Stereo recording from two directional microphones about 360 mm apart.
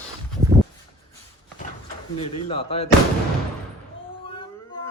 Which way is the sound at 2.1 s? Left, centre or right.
Centre.